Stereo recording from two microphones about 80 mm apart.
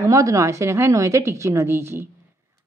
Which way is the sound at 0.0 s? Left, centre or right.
Right.